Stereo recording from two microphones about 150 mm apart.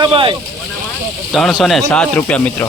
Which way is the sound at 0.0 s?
35° right (ahead or behind).